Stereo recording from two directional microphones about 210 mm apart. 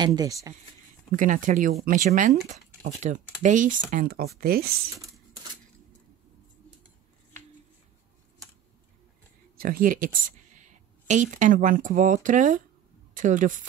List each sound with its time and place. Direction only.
0.0 s speech: 20° right (ahead or behind)
1.1 s speech: 40° right (ahead or behind)
9.6 s speech: 45° right (ahead or behind)